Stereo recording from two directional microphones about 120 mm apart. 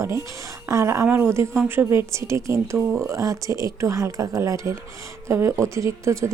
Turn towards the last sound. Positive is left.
turn(degrees=-25)  # may be behind; listen again after turning